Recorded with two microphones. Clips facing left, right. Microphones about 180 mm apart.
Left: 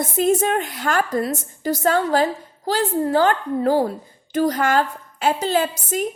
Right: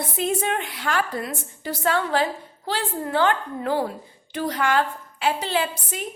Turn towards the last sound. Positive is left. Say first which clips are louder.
# left 5 dB
turn(degrees=45)  # may be behind; listen again after turning